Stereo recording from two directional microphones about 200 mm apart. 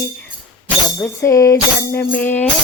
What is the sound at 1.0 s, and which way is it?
Music, 15° left (ahead or behind).